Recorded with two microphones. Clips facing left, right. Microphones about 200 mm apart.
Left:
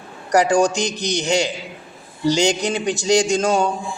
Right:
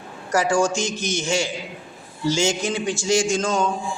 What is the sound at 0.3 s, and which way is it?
Speech, 15° left (ahead or behind).